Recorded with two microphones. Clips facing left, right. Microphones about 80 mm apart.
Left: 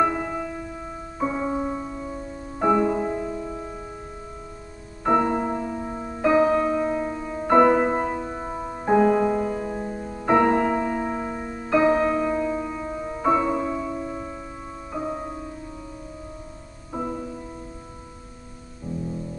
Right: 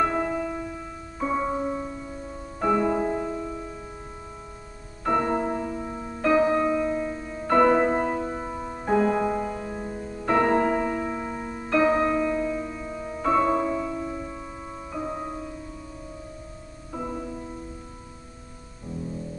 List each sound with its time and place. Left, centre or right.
0.2 s music: centre
3.0 s music: centre
3.3 s music: centre
5.0 s music: centre
7.7 s music: centre
8.5 s music: centre
10.6 s music: centre
11.0 s music: centre
16.9 s music: centre